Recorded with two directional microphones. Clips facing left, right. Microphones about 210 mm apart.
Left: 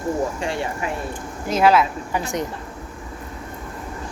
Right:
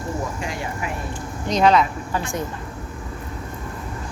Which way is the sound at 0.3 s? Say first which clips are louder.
Left 4 dB; 30° left (ahead or behind).